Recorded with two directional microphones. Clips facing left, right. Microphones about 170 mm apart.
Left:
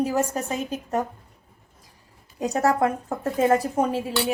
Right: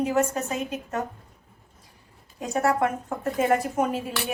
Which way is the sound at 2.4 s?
40° left (ahead or behind).